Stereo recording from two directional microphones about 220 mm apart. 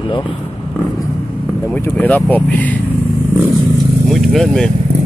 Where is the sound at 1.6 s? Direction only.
10° left (ahead or behind).